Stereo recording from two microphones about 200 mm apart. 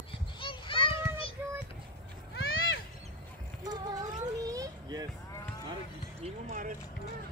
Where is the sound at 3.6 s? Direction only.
20° right (ahead or behind).